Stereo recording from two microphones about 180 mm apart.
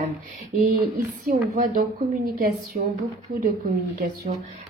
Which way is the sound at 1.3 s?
50° right (ahead or behind).